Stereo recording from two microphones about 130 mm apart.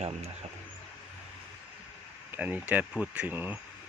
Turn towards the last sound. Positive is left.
turn(degrees=-15)  # may be behind; listen again after turning